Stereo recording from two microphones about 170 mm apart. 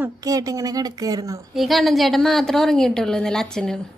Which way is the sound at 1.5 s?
Centre (ahead or behind).